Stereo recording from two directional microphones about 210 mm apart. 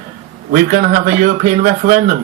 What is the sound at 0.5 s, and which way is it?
Speech, 40° right (ahead or behind).